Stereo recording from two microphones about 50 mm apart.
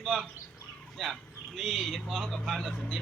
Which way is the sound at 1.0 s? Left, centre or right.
Centre.